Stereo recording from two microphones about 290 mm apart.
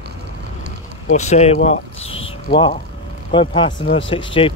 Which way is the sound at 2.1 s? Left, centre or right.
Centre.